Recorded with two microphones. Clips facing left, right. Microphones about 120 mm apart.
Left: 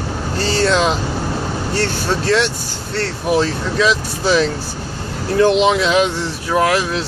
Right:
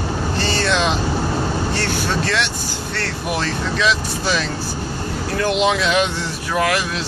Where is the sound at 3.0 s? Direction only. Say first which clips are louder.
Left 7 dB; 30° left (ahead or behind).